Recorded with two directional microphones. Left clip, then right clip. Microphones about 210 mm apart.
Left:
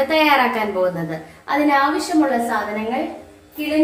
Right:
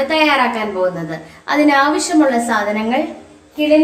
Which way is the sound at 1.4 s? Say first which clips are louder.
Right 4 dB; 30° right (ahead or behind).